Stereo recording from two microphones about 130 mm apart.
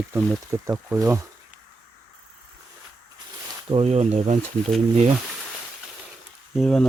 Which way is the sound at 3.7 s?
50° right (ahead or behind).